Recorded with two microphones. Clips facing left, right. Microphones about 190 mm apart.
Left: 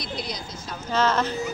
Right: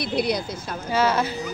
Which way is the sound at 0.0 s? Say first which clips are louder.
Right 9 dB; 60° right (ahead or behind).